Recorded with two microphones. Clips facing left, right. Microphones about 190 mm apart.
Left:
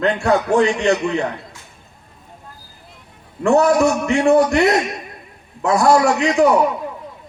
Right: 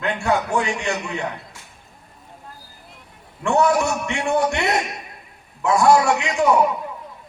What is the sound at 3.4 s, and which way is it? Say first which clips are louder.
Speech: left 5 dB; 40° left (ahead or behind).